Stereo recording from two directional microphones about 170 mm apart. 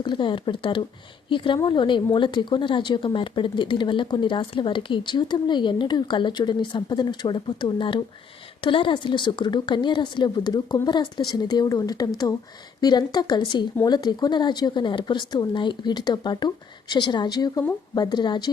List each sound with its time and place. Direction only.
0.0 s a woman's voice: 25° left (ahead or behind)